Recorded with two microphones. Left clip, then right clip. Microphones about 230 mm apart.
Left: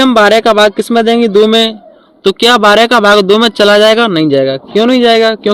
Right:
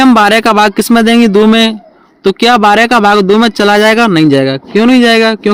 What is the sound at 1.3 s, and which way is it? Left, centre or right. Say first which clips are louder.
Speech: even; right.